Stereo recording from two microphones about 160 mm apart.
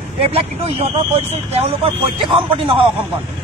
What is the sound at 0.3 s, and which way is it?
Speech, 35° right (ahead or behind).